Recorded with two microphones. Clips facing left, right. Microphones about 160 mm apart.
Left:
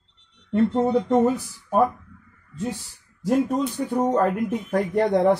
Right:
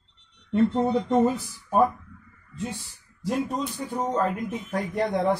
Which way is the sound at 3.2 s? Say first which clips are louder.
Left 6 dB; 55° left (ahead or behind).